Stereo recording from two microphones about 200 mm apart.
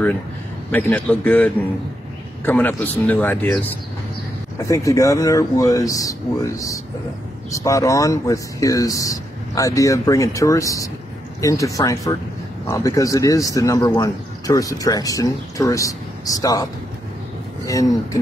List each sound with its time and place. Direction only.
0.7 s speech: 5° left (ahead or behind)
17.6 s speech: 15° left (ahead or behind)